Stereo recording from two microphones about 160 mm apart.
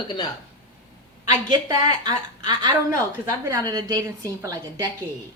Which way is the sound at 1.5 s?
25° right (ahead or behind).